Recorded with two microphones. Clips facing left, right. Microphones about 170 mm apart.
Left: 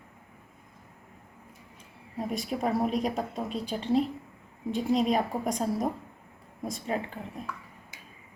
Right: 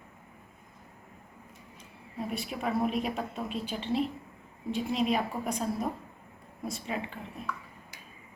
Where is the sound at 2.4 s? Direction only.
40° left (ahead or behind).